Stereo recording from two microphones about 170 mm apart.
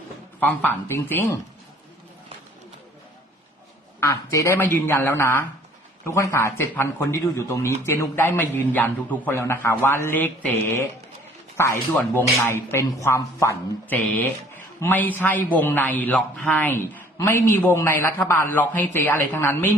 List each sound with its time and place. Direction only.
0.3 s a man's voice: 10° left (ahead or behind)
4.0 s a man's voice: 20° left (ahead or behind)
14.0 s a man's voice: 5° left (ahead or behind)